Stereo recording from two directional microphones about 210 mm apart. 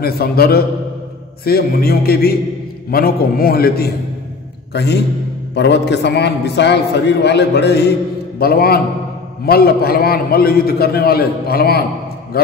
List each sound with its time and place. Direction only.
0.0 s a man's voice: 45° left (ahead or behind)